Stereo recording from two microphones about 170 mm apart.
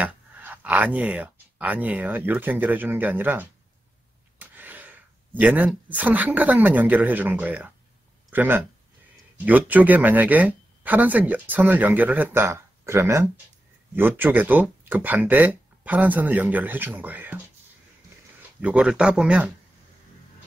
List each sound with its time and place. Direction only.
0.0 s speech: 10° right (ahead or behind)
4.4 s a sound: 10° right (ahead or behind)
5.9 s speech: 10° right (ahead or behind)
18.6 s speech: 5° right (ahead or behind)